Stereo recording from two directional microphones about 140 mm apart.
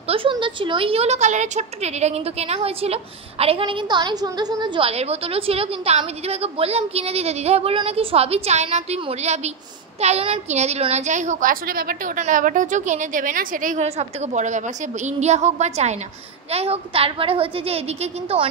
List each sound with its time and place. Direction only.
0.1 s a woman's voice: 40° right (ahead or behind)
4.8 s a woman's voice: 45° right (ahead or behind); by 12.0 s 90° right
12.2 s a woman's voice: 70° right (ahead or behind)
13.8 s a woman's voice: 55° right (ahead or behind)